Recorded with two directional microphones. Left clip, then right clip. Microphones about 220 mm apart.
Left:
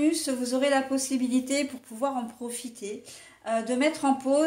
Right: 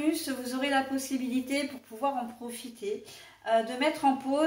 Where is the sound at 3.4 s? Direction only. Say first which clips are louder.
Left 1 dB; 45° left (ahead or behind).